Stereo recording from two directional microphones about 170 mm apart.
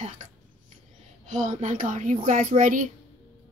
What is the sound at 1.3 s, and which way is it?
Speech, 45° right (ahead or behind).